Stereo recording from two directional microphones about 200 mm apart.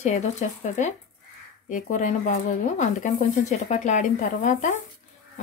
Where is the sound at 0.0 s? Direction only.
35° left (ahead or behind).